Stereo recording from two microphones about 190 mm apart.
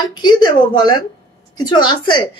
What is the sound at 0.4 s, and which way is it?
Speech, 20° left (ahead or behind).